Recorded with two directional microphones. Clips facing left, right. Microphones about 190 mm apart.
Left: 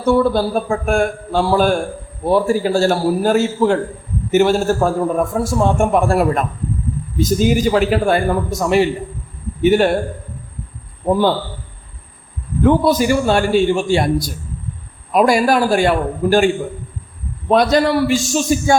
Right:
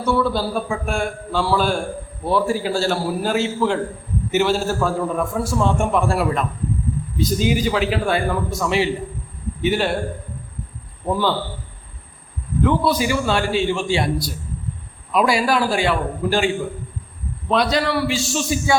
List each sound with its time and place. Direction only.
0.0 s a man's voice: 50° left (ahead or behind)
12.6 s a man's voice: 45° left (ahead or behind)
17.5 s a man's voice: 45° left (ahead or behind)